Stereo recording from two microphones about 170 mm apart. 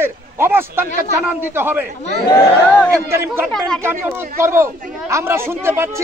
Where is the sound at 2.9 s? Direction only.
15° right (ahead or behind).